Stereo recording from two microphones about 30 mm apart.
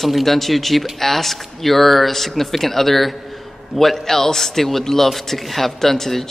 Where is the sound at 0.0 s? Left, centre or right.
Centre.